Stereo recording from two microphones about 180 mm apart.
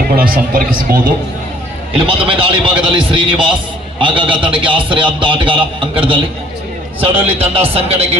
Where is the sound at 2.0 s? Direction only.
30° right (ahead or behind).